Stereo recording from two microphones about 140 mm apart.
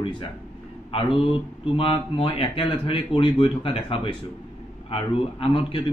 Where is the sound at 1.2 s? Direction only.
40° left (ahead or behind).